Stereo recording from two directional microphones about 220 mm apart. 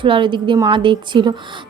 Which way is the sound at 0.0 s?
20° right (ahead or behind).